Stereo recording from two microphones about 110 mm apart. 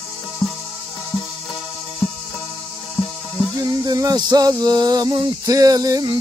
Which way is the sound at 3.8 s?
35° right (ahead or behind).